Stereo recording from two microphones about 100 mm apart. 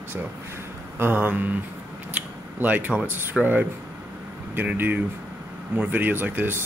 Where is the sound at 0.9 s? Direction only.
20° right (ahead or behind).